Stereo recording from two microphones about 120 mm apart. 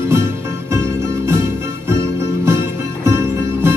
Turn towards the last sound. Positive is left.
turn(degrees=-20)  # may be behind; listen again after turning